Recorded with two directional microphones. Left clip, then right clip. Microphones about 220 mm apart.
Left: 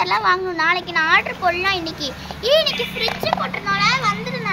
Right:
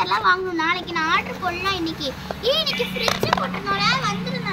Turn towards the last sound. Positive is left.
turn(degrees=35)  # may be behind; listen again after turning